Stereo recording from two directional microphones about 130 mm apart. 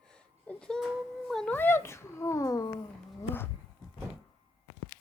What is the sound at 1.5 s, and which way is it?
A child's voice, 15° left (ahead or behind).